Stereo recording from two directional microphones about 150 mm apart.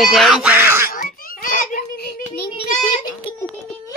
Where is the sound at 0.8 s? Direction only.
70° left (ahead or behind); by 2.1 s 85° left.